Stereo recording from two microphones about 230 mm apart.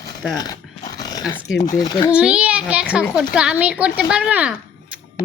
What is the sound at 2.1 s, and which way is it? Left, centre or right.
A child's voice, centre.